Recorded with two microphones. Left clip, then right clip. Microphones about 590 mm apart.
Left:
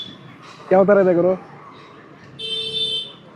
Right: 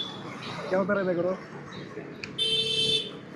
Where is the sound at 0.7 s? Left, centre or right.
Left.